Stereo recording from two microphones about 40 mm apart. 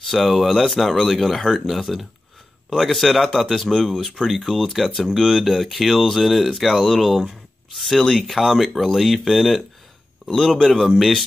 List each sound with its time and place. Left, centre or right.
0.0 s speech: centre